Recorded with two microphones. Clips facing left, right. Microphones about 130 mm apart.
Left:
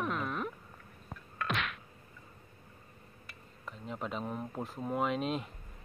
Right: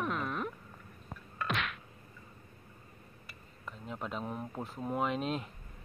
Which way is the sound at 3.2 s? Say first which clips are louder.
Even; centre (ahead or behind).